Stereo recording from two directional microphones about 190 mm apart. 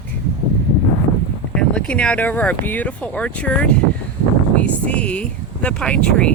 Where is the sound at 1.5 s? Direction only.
5° left (ahead or behind).